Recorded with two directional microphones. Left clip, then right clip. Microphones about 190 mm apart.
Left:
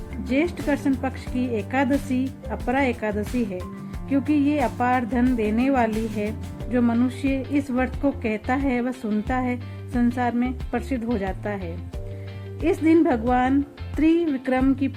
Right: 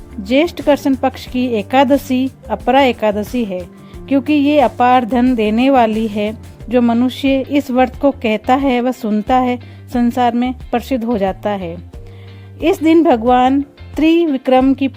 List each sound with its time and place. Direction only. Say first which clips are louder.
0.3 s a woman's voice: right 11 dB; 50° right (ahead or behind)